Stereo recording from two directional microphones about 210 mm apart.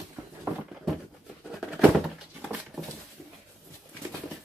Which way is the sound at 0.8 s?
Centre (ahead or behind).